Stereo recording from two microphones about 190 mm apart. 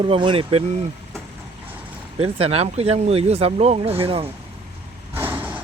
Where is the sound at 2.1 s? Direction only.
30° right (ahead or behind).